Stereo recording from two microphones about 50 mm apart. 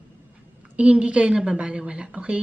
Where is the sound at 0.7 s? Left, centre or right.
Right.